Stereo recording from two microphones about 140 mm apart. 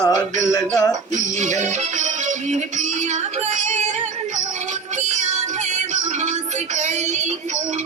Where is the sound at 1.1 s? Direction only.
60° right (ahead or behind).